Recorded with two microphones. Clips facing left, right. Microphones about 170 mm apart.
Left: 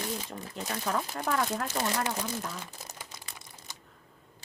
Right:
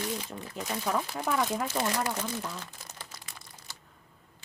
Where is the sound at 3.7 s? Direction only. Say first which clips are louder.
Left 1 dB; 20° left (ahead or behind).